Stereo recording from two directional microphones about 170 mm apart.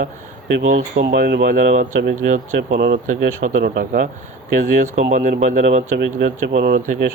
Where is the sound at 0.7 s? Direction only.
60° right (ahead or behind); by 1.6 s 75° right (ahead or behind).